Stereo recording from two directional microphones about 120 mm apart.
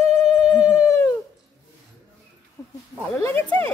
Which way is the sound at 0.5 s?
30° left (ahead or behind).